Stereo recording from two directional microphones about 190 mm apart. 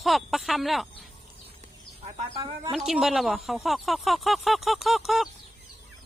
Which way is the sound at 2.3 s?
25° right (ahead or behind).